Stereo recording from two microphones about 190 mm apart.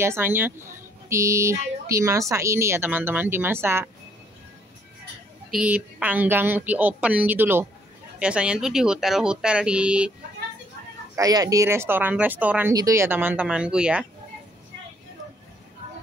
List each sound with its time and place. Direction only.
0.0 s speech: 10° right (ahead or behind)
5.5 s speech: 5° right (ahead or behind)
11.1 s speech: 20° right (ahead or behind)